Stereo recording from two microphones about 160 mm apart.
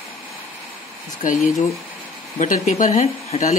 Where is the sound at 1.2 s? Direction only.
55° left (ahead or behind).